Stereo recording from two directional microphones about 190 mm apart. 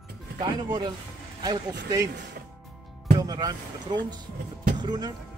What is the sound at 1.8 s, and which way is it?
Speech, 20° right (ahead or behind).